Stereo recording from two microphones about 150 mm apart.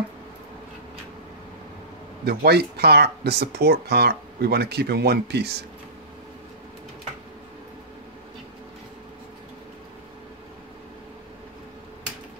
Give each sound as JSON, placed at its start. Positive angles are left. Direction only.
{"t": 2.2, "sound": "speech", "side_deg": -90}